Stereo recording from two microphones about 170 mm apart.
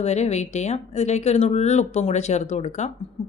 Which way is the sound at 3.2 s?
30° left (ahead or behind).